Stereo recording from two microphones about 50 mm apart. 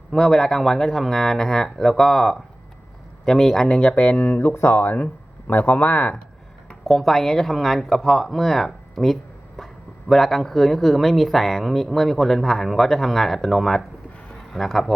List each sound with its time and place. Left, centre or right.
0.1 s speech: centre
3.8 s speech: left
4.7 s speech: left
6.8 s speech: centre
9.6 s a sound: centre
10.1 s speech: centre